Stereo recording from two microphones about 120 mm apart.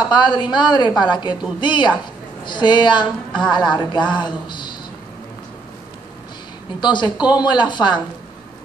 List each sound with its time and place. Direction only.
0.1 s a woman's voice: 40° left (ahead or behind)
6.8 s a woman's voice: 40° left (ahead or behind)